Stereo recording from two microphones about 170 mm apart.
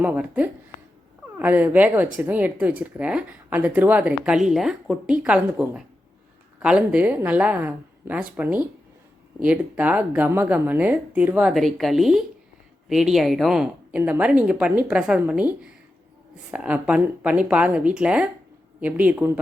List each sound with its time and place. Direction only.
0.0 s a woman's voice: 10° right (ahead or behind)